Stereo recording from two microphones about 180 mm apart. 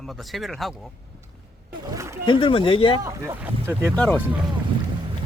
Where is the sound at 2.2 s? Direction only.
30° left (ahead or behind).